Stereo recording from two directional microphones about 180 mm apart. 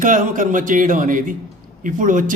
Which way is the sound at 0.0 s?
45° right (ahead or behind).